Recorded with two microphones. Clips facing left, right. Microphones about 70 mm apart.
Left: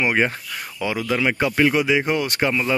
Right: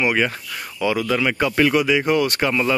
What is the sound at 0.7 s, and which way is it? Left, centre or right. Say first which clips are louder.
Speech: right 3 dB; left.